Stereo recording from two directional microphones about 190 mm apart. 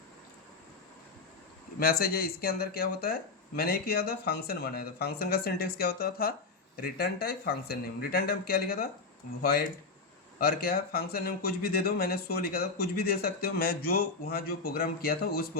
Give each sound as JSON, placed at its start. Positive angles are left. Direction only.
{"t": 1.8, "sound": "speech", "side_deg": 50}